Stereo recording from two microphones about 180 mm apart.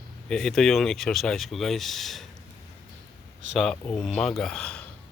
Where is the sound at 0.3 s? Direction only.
Centre (ahead or behind).